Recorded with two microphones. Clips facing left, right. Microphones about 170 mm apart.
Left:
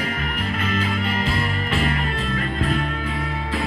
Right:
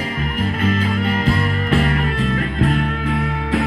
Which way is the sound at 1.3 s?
50° right (ahead or behind).